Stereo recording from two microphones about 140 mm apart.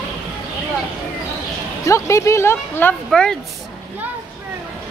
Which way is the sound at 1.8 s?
20° left (ahead or behind).